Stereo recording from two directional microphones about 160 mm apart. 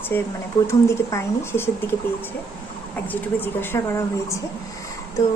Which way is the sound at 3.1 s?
15° left (ahead or behind).